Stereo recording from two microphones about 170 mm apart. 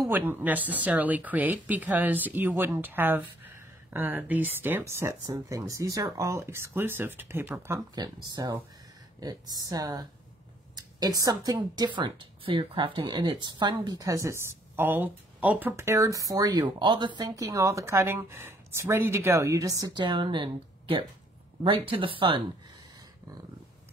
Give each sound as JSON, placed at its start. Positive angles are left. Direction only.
{"t": 0.0, "sound": "speech", "side_deg": -10}